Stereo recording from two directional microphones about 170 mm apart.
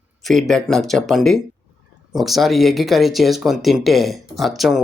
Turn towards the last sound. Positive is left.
turn(degrees=0)  # may be behind; listen again after turning